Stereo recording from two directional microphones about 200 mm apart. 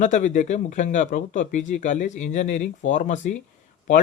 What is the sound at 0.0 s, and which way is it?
Speech, 40° left (ahead or behind).